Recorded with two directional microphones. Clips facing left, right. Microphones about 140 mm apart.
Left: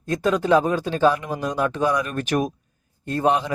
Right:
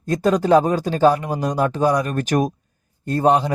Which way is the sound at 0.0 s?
35° right (ahead or behind).